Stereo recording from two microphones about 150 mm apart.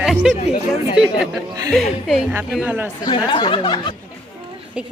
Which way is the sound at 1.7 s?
Centre (ahead or behind).